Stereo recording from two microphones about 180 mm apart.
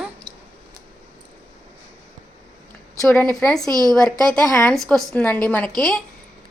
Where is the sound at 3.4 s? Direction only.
5° left (ahead or behind).